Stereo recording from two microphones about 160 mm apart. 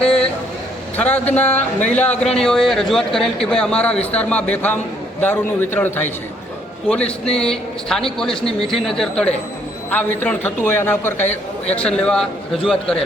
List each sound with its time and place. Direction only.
0.9 s a man's voice: 10° left (ahead or behind)
11.3 s a man's voice: 40° left (ahead or behind)
11.8 s a man's voice: 5° left (ahead or behind)